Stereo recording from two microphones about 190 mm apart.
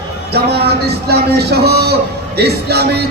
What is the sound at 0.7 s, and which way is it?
A man's voice, 60° right (ahead or behind).